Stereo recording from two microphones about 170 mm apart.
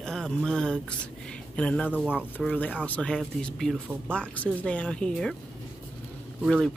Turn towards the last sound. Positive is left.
turn(degrees=0)  # may be behind; listen again after turning